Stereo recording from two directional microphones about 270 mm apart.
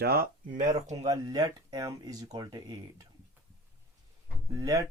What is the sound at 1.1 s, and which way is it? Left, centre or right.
Speech, centre.